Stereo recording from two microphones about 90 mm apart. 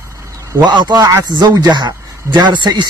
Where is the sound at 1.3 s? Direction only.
50° right (ahead or behind).